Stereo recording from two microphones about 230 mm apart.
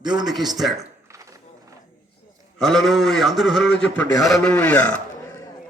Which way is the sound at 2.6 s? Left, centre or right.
Centre.